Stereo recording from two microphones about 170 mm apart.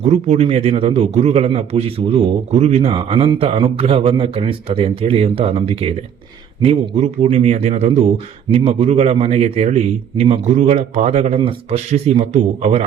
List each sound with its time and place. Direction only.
0.0 s a man's voice: 40° right (ahead or behind)